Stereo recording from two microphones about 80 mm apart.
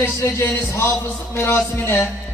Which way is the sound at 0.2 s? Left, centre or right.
Left.